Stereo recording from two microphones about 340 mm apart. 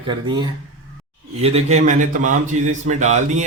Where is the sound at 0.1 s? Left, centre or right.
Centre.